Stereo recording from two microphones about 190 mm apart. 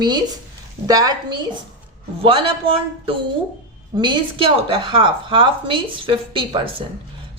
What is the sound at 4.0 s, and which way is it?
A woman's voice, 25° right (ahead or behind).